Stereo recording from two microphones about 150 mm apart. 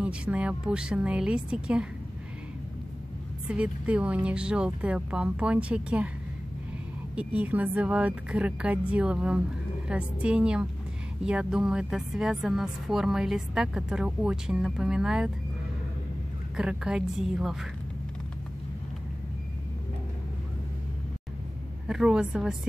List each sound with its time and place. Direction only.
0.0 s speech: 5° right (ahead or behind)
3.4 s speech: 10° right (ahead or behind)
7.2 s speech: 10° right (ahead or behind)
16.5 s speech: 5° right (ahead or behind)
21.8 s speech: 5° right (ahead or behind)